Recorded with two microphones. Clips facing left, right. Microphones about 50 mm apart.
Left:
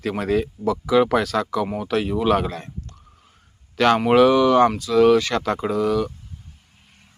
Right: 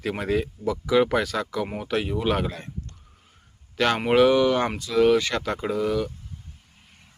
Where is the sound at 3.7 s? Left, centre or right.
Centre.